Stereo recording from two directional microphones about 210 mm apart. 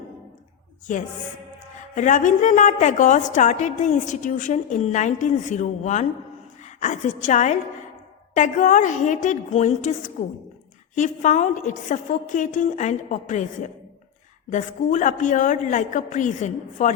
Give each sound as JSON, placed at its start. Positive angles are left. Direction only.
{"t": 0.9, "sound": "a woman's voice", "side_deg": 35}
{"t": 14.5, "sound": "a woman's voice", "side_deg": 35}